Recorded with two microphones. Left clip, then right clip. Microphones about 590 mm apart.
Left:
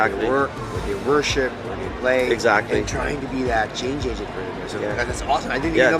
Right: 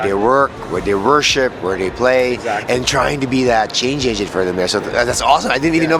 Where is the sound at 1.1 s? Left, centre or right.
Right.